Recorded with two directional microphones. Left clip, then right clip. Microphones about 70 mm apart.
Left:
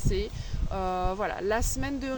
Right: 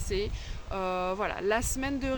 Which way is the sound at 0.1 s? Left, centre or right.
Right.